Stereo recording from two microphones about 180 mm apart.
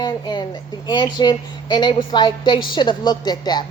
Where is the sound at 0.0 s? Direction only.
25° left (ahead or behind).